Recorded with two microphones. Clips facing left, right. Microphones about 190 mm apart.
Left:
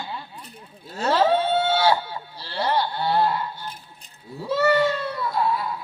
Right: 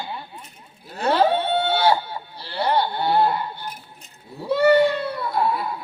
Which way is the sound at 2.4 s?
60° right (ahead or behind).